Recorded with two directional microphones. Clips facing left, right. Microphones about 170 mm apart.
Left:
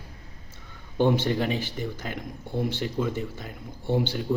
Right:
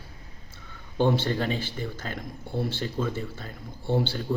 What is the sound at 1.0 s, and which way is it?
Speech, 15° left (ahead or behind).